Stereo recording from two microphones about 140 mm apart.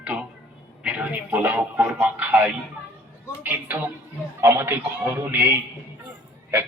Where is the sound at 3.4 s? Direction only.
15° right (ahead or behind).